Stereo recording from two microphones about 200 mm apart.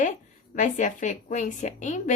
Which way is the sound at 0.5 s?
40° left (ahead or behind).